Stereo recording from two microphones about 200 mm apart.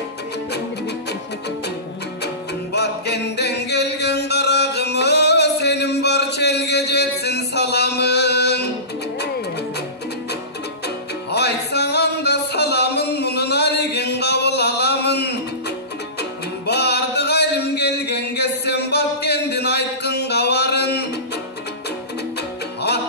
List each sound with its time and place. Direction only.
2.7 s chant: 55° left (ahead or behind)
11.3 s music: 55° left (ahead or behind)